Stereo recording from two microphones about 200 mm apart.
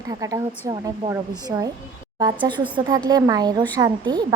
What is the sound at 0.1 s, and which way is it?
A woman's voice, 15° right (ahead or behind).